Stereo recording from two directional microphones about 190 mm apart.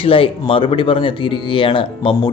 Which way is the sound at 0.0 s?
30° left (ahead or behind).